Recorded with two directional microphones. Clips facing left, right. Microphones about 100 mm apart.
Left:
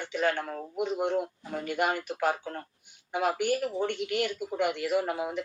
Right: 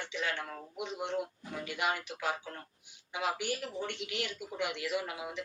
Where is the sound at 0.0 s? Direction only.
50° left (ahead or behind).